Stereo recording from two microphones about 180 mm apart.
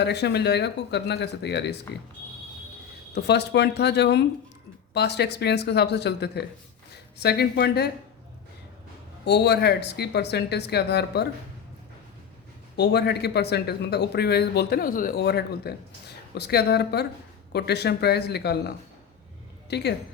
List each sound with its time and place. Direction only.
0.0 s speech: 70° left (ahead or behind)
3.2 s speech: 70° left (ahead or behind)
9.2 s speech: 65° left (ahead or behind)
12.7 s a man's voice: 65° left (ahead or behind)
19.7 s speech: 70° left (ahead or behind)